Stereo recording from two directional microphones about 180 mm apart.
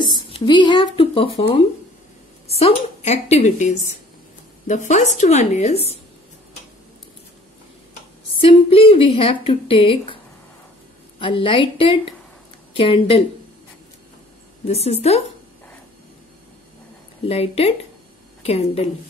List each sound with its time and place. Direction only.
0.3 s a woman's voice: 25° left (ahead or behind)
8.4 s a woman's voice: 30° left (ahead or behind)
14.6 s a woman's voice: 35° left (ahead or behind)
17.3 s a woman's voice: 35° left (ahead or behind)